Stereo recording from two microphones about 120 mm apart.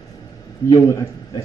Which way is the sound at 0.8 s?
25° left (ahead or behind).